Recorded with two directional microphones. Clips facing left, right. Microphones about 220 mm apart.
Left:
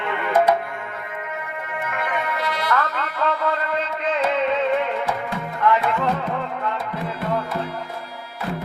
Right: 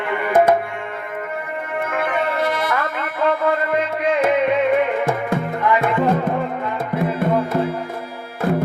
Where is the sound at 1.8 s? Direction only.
50° right (ahead or behind).